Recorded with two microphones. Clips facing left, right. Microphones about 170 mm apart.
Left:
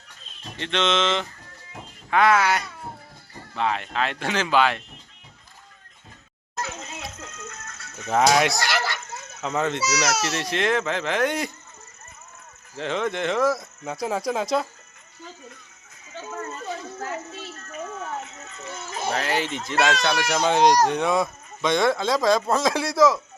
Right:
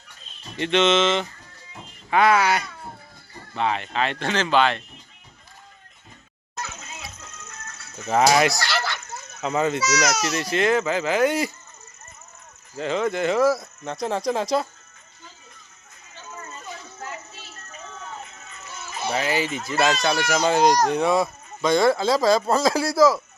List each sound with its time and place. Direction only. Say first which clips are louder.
0.6 s speech: right 4 dB; 5° right (ahead or behind)
7.9 s speech: right 1 dB; centre (ahead or behind)
9.8 s speech: right 1 dB; 10° left (ahead or behind)
12.7 s speech: right 2 dB; centre (ahead or behind)
18.2 s a sound: left 4 dB; 85° left
18.4 s music: left 5 dB; 20° left (ahead or behind)
18.7 s a sound: left 1 dB; 50° left (ahead or behind)
19.1 s speech: right 2 dB; 5° right (ahead or behind)